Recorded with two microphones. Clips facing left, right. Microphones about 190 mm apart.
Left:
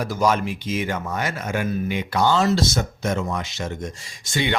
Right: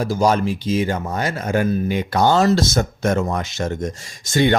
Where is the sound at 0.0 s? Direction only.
30° right (ahead or behind).